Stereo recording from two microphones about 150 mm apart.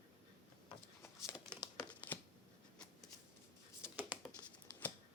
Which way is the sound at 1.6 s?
20° left (ahead or behind).